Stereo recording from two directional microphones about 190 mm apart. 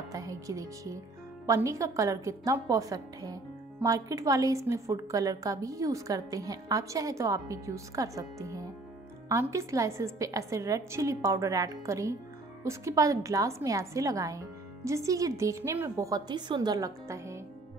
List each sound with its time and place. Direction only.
0.1 s a woman's voice: 15° right (ahead or behind)